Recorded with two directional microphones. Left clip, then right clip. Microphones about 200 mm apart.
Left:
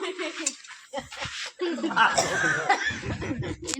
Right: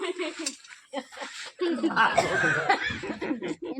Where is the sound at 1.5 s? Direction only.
50° right (ahead or behind).